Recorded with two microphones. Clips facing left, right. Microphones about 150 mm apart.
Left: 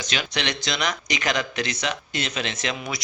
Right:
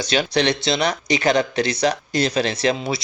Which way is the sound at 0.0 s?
35° right (ahead or behind).